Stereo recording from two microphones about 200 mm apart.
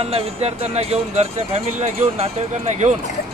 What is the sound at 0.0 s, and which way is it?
Speech, 30° right (ahead or behind).